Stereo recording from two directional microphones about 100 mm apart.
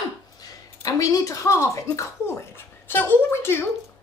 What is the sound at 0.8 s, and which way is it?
A woman's voice, 35° left (ahead or behind).